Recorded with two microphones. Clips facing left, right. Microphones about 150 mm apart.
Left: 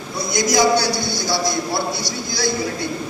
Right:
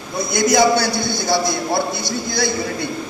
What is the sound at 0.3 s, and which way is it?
A man's voice, 55° right (ahead or behind).